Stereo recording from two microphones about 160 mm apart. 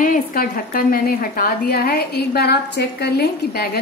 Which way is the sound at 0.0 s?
65° left (ahead or behind).